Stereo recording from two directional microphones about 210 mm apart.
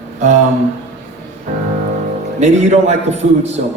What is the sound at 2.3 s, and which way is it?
A man's voice, 35° right (ahead or behind).